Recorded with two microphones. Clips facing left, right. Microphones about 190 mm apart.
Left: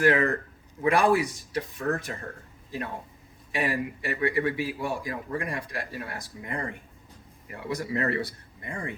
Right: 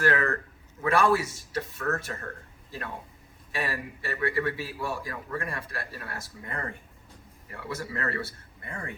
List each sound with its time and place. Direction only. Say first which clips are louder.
0.0 s a man's voice: left 3 dB; 15° left (ahead or behind)
3.5 s a man's voice: left 5 dB; 20° left (ahead or behind)